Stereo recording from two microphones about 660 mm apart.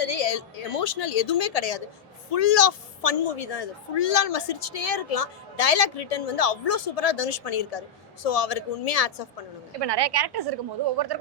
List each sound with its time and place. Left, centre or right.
0.0 s a woman's voice: left
9.8 s a woman's voice: right